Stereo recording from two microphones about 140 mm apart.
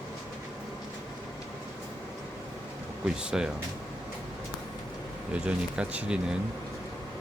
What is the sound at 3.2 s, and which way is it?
Speech, 5° right (ahead or behind).